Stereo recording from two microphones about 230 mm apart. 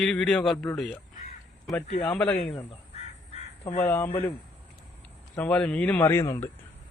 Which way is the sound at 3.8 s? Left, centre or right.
Centre.